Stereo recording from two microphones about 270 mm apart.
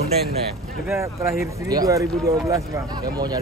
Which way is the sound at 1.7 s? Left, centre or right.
Centre.